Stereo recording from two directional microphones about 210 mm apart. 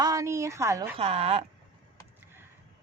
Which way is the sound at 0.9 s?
30° right (ahead or behind).